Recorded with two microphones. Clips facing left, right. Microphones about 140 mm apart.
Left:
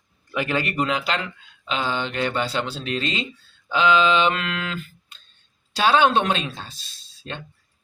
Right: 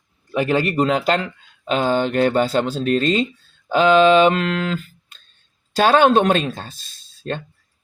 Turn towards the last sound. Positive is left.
turn(degrees=-45)  # may be behind; listen again after turning